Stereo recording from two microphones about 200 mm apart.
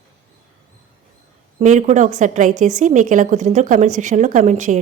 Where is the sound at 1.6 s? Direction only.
35° right (ahead or behind).